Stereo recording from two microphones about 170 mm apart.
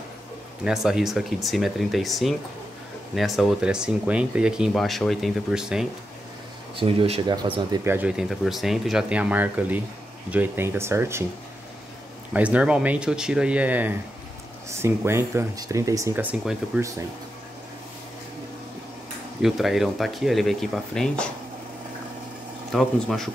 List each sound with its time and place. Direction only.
0.7 s speech: centre (ahead or behind)
6.8 s speech: 30° right (ahead or behind)
7.8 s speech: 10° right (ahead or behind)
12.3 s speech: 5° right (ahead or behind)
19.4 s speech: centre (ahead or behind)
22.7 s speech: centre (ahead or behind)